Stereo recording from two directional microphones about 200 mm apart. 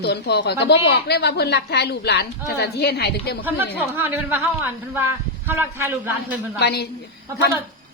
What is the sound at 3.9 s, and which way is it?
A woman's voice, 10° right (ahead or behind).